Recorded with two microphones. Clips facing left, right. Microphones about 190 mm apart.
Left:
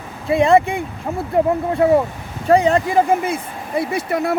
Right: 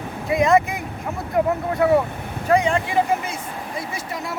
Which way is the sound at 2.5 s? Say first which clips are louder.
Left 5 dB; 35° left (ahead or behind).